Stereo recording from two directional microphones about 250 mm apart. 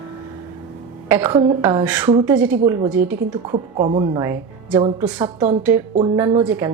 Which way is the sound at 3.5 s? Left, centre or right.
Right.